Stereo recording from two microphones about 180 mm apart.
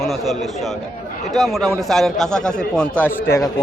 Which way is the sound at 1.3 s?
Centre (ahead or behind).